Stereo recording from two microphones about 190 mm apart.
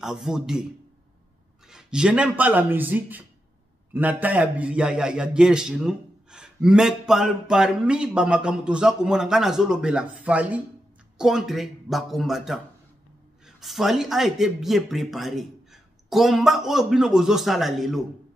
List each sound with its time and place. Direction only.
0.0 s a man's voice: centre (ahead or behind)
1.7 s a man's voice: 5° right (ahead or behind)
13.6 s a man's voice: centre (ahead or behind)